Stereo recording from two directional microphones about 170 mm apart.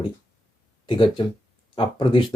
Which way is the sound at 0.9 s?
30° left (ahead or behind).